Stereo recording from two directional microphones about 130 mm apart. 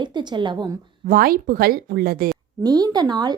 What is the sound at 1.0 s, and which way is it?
A woman's voice, 90° right.